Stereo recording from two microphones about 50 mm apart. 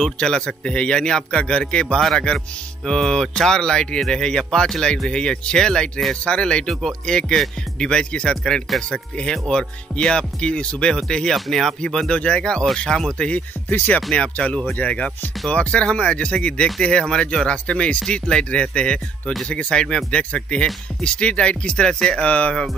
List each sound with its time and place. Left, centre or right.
0.0 s speech: centre
11.8 s speech: centre
13.7 s speech: left
14.1 s speech: left
22.2 s speech: left